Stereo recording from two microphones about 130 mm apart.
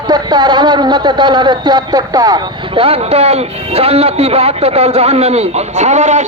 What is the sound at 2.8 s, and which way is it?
A man's voice, 50° right (ahead or behind).